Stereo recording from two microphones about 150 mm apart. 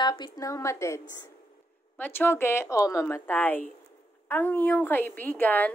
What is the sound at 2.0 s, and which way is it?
A woman's voice, 15° left (ahead or behind).